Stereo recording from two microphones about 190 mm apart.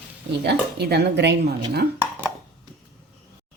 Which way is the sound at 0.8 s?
60° right (ahead or behind).